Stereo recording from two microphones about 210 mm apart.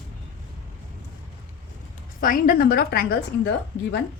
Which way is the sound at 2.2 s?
40° left (ahead or behind).